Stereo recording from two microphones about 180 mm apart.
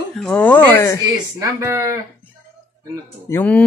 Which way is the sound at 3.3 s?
10° left (ahead or behind).